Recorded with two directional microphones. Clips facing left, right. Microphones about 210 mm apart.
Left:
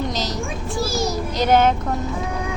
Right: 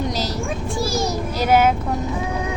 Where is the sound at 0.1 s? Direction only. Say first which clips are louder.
Right 1 dB; 10° right (ahead or behind).